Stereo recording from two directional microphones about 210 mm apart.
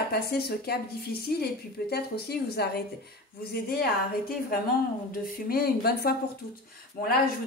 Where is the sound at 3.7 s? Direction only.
45° left (ahead or behind).